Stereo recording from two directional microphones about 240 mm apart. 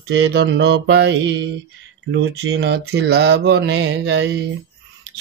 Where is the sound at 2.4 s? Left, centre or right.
Right.